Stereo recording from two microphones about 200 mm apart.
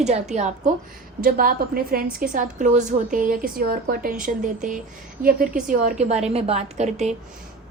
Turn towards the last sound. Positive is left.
turn(degrees=-35)  # may be behind; listen again after turning